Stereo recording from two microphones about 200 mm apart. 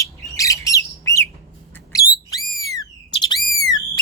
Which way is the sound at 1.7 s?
10° left (ahead or behind).